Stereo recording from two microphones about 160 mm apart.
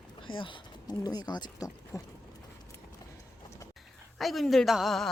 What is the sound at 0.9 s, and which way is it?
Speech, 25° left (ahead or behind).